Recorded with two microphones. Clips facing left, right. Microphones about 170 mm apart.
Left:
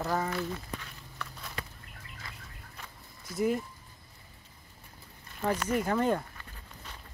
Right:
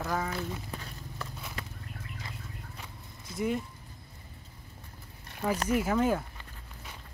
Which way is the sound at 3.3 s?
Centre (ahead or behind).